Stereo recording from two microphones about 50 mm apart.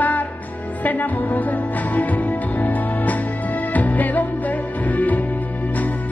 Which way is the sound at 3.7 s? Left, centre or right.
Left.